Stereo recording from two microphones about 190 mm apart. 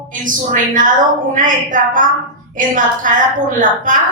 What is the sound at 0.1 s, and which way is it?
A woman's voice, 45° right (ahead or behind).